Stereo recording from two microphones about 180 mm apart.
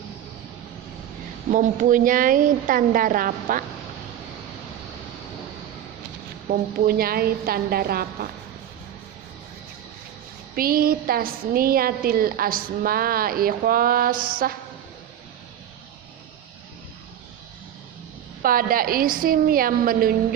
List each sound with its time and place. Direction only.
1.5 s a woman's voice: 45° right (ahead or behind)
6.5 s a woman's voice: 55° right (ahead or behind)
10.5 s a woman's voice: 55° right (ahead or behind)
18.4 s a woman's voice: 55° right (ahead or behind)